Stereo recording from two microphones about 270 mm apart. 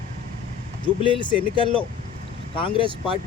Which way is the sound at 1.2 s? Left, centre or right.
Centre.